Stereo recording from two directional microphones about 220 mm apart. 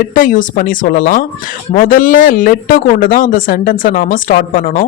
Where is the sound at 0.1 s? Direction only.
35° left (ahead or behind).